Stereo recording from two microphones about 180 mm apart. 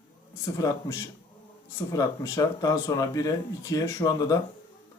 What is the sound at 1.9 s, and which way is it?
Speech, 20° left (ahead or behind).